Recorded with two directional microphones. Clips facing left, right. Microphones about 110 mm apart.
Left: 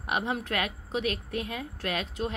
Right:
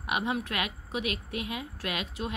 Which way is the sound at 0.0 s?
35° left (ahead or behind).